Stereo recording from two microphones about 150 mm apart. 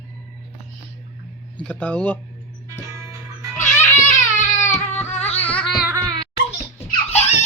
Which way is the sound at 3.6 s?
15° left (ahead or behind).